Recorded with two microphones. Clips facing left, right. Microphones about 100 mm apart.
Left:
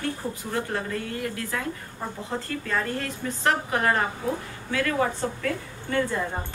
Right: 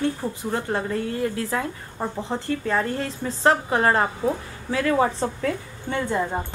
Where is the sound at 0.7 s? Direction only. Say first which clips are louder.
Right 4 dB; 25° right (ahead or behind).